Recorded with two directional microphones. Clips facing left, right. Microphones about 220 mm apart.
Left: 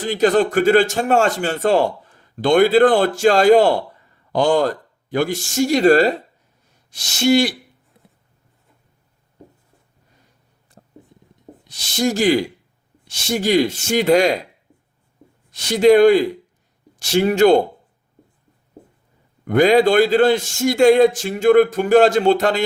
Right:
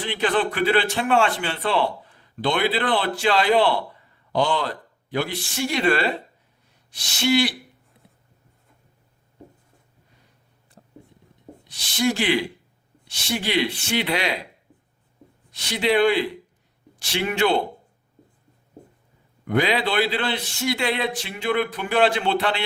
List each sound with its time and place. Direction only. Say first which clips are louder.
0.0 s a man's voice: left 7 dB; 40° left (ahead or behind)
10.8 s a sound: left 2 dB; 40° left (ahead or behind)
11.7 s a man's voice: left 3 dB; 40° left (ahead or behind)
15.5 s a man's voice: left 9 dB; 45° left (ahead or behind)
19.5 s a man's voice: left 9 dB; 45° left (ahead or behind)